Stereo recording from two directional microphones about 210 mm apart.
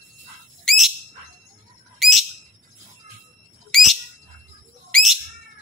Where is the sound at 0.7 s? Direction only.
Centre (ahead or behind).